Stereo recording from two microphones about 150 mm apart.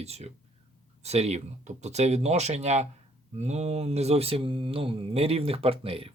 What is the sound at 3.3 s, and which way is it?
Mantra, 50° right (ahead or behind).